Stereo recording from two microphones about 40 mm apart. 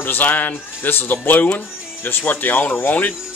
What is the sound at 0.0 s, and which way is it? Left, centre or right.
Speech, left.